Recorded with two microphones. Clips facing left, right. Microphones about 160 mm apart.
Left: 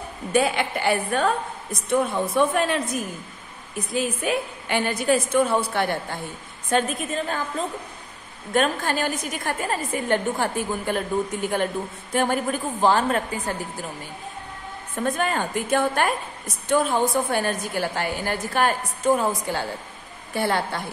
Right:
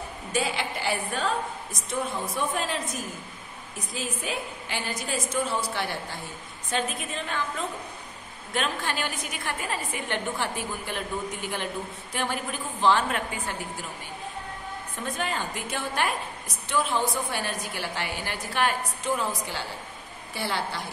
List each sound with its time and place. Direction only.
0.3 s a woman's voice: 55° left (ahead or behind)
3.9 s a woman's voice: 60° left (ahead or behind)
6.7 s a woman's voice: 40° left (ahead or behind)
15.0 s a woman's voice: 50° left (ahead or behind)